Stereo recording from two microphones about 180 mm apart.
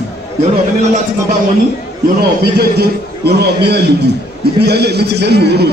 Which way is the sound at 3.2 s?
65° right (ahead or behind).